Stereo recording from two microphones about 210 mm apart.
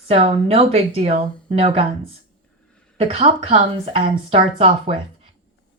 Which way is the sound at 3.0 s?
30° right (ahead or behind).